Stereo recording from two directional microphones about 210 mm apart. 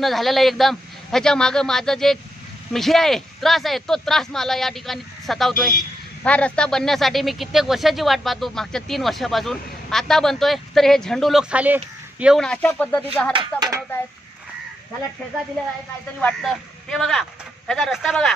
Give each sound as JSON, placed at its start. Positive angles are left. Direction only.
{"t": 0.0, "sound": "speech", "side_deg": 0}
{"t": 13.3, "sound": "a sound", "side_deg": -20}
{"t": 16.2, "sound": "speech", "side_deg": 5}